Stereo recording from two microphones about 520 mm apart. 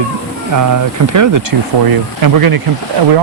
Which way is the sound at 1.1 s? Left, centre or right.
Right.